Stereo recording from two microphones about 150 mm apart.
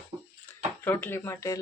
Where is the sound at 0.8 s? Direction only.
15° left (ahead or behind).